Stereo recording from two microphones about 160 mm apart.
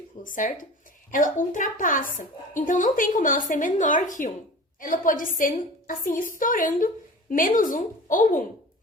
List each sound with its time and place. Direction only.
0.2 s a woman's voice: 55° left (ahead or behind)